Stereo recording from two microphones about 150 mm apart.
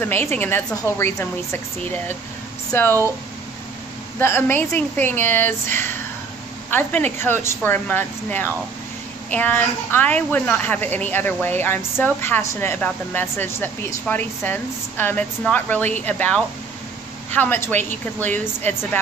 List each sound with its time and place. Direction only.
0.0 s speech: 15° left (ahead or behind)
4.2 s speech: 15° left (ahead or behind)